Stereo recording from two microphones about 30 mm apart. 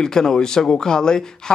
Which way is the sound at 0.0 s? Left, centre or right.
Left.